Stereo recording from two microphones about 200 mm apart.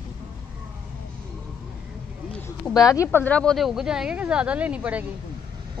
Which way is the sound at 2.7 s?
15° left (ahead or behind).